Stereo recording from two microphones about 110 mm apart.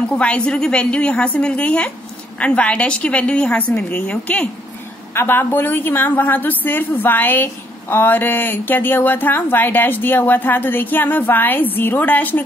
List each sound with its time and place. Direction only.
0.1 s a woman's voice: 10° left (ahead or behind)